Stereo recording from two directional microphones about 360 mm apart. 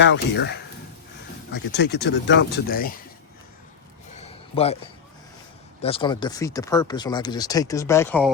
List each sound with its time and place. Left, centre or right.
0.0 s speech: left
4.2 s a sound: centre
5.8 s speech: centre